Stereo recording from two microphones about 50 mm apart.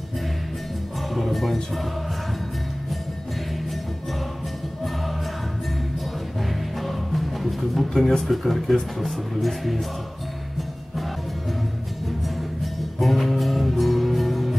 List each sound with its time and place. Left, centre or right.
1.1 s music: centre
6.8 s music: centre
8.2 s speech: centre
13.0 s music: centre